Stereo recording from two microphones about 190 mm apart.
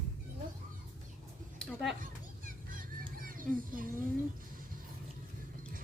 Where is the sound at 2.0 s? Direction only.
45° right (ahead or behind).